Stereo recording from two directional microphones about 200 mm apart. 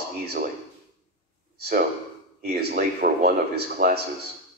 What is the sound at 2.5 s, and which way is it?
Speech, 50° right (ahead or behind).